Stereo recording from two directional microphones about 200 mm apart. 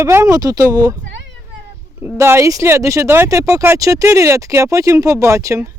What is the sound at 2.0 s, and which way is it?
Speech, 10° right (ahead or behind).